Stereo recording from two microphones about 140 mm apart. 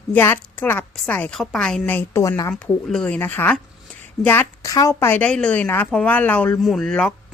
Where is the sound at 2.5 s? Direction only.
5° left (ahead or behind).